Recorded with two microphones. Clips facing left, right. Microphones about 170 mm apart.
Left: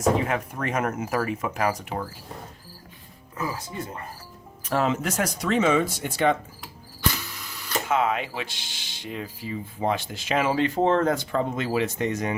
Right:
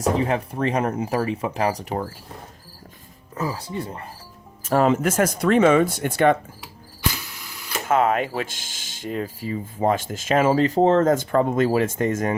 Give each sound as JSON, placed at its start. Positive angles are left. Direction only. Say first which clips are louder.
{"t": 0.2, "sound": "speech", "louder": "right 5 dB", "side_deg": -30}
{"t": 3.3, "sound": "speech", "louder": "right 4 dB", "side_deg": -35}
{"t": 4.6, "sound": "speech", "louder": "right 6 dB", "side_deg": -50}
{"t": 7.9, "sound": "speech", "louder": "right 5 dB", "side_deg": -50}